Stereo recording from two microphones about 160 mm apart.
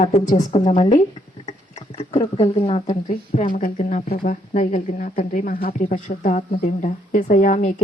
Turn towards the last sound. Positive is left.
turn(degrees=50)  # may be behind; listen again after turning